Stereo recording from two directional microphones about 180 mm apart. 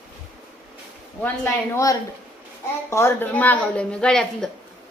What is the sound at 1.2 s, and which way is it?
A woman's voice, 15° left (ahead or behind).